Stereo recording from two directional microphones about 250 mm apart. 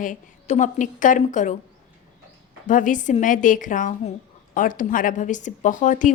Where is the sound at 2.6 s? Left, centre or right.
Left.